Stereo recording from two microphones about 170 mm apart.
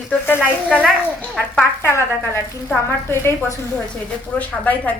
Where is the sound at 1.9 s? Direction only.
15° left (ahead or behind).